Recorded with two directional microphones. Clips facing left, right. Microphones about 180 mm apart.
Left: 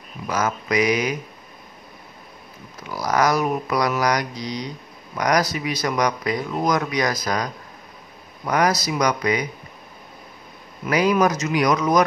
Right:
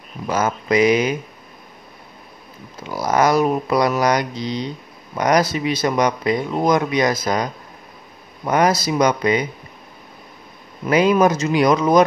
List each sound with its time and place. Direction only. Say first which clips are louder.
0.3 s speech: right 4 dB; 25° right (ahead or behind)
2.9 s speech: right 3 dB; 25° right (ahead or behind)
10.9 s speech: right 4 dB; 25° right (ahead or behind)